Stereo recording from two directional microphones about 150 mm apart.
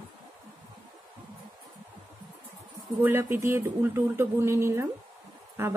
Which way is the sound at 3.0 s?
15° right (ahead or behind).